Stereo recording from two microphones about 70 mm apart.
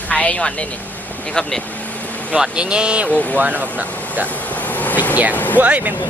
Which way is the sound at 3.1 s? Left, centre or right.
Left.